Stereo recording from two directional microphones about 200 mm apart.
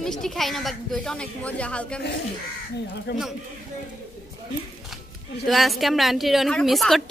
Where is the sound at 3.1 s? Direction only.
55° left (ahead or behind).